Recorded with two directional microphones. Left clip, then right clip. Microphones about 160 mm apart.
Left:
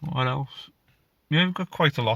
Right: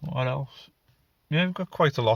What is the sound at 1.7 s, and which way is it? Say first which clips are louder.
Speech: even; centre (ahead or behind).